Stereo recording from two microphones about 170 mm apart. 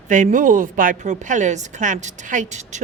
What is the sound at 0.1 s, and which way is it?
A woman's voice, 50° right (ahead or behind).